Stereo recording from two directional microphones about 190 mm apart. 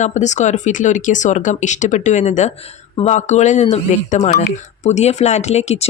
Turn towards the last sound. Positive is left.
turn(degrees=35)  # may be behind; listen again after turning